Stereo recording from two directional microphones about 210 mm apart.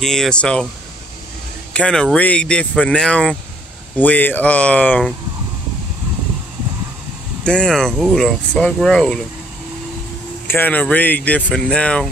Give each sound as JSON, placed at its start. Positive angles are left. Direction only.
{"t": 0.0, "sound": "speech", "side_deg": 0}
{"t": 1.7, "sound": "speech", "side_deg": 5}
{"t": 7.4, "sound": "speech", "side_deg": 5}
{"t": 10.5, "sound": "speech", "side_deg": 10}